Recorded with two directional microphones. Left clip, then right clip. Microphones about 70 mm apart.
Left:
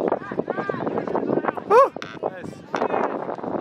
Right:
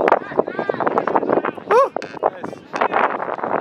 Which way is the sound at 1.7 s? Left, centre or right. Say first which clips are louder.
Even; centre.